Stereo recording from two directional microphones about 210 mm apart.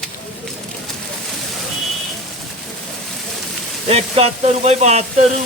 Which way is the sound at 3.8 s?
30° right (ahead or behind).